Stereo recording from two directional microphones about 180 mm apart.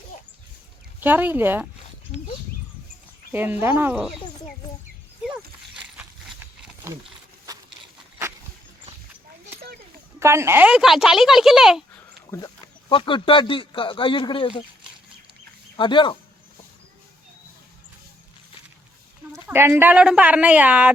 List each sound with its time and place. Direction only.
0.9 s speech: 10° right (ahead or behind)
3.3 s speech: 10° right (ahead or behind)
5.7 s a sound: 5° right (ahead or behind)
10.2 s speech: 15° right (ahead or behind)
12.9 s speech: 30° left (ahead or behind)
15.8 s speech: 25° left (ahead or behind)
19.5 s speech: 10° right (ahead or behind)